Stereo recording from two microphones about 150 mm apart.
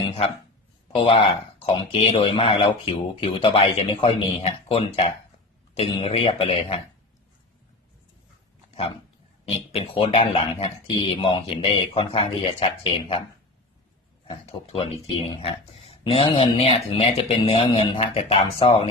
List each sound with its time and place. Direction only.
0.9 s speech: 40° left (ahead or behind)
9.7 s speech: 40° left (ahead or behind)
14.4 s speech: 40° left (ahead or behind)